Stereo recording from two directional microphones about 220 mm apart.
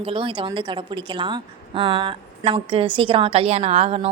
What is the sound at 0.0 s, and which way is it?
A woman's voice, 25° right (ahead or behind).